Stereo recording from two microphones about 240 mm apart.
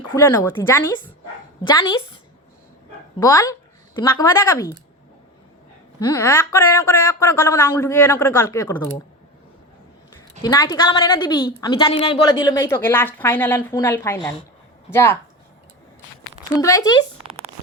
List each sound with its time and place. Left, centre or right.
0.1 s a woman's voice: centre
3.2 s speech: centre
6.1 s speech: centre
10.4 s speech: centre
16.6 s speech: centre